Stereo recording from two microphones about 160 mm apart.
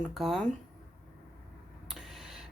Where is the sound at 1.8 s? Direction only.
5° right (ahead or behind).